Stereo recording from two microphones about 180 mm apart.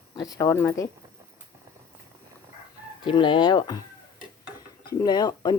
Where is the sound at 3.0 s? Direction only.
25° left (ahead or behind).